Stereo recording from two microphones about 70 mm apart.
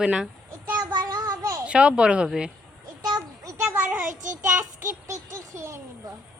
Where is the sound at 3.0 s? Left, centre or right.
Right.